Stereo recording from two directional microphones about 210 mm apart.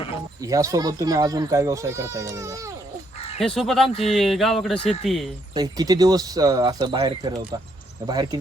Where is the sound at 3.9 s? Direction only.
30° left (ahead or behind).